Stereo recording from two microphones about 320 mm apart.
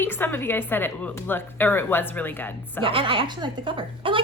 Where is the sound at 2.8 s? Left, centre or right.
Centre.